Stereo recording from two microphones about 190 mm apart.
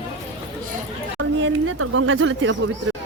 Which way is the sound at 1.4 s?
90° right.